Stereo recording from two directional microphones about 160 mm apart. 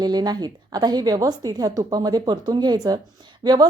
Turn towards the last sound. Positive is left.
turn(degrees=-25)  # may be behind; listen again after turning